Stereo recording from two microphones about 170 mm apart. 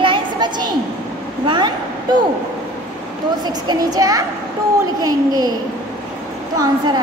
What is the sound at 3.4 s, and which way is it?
Speech, 25° right (ahead or behind).